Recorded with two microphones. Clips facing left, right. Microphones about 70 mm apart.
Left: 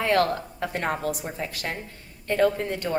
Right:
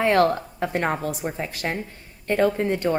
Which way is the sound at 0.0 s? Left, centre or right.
Right.